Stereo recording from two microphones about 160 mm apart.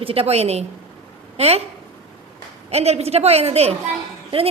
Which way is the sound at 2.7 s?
40° right (ahead or behind).